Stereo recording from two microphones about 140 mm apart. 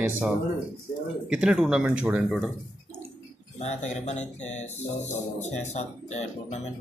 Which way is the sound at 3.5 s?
55° left (ahead or behind).